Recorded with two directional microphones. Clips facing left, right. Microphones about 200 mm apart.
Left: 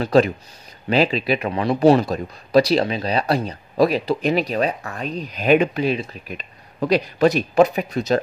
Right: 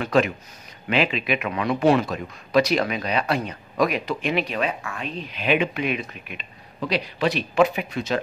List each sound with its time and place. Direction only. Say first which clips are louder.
0.0 s a man's voice: left 4 dB; 35° left (ahead or behind)